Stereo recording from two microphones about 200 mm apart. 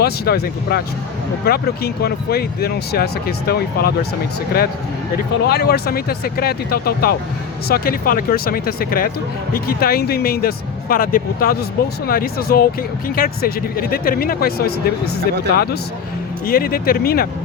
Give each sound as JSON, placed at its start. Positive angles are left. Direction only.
{"t": 0.0, "sound": "speech", "side_deg": 50}
{"t": 5.1, "sound": "speech", "side_deg": 55}